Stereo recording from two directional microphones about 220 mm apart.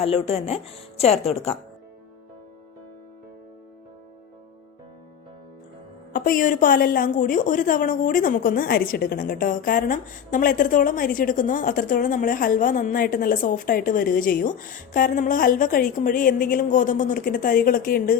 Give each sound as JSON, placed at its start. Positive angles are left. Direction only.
{"t": 0.0, "sound": "a woman's voice", "side_deg": 25}
{"t": 6.1, "sound": "a woman's voice", "side_deg": 40}